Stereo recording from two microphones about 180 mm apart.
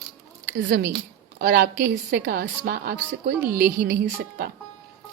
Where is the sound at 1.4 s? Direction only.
65° right (ahead or behind).